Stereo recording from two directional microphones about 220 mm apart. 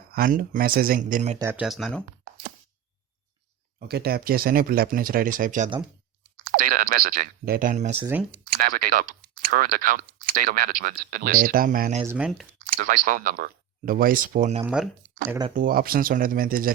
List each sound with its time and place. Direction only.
0.1 s speech: 40° right (ahead or behind)
1.4 s speech: 10° right (ahead or behind)
3.8 s speech: 45° right (ahead or behind)
12.0 s speech: 5° right (ahead or behind)
12.7 s speech: 40° right (ahead or behind)
14.6 s speech: 5° right (ahead or behind)
15.4 s speech: 40° right (ahead or behind)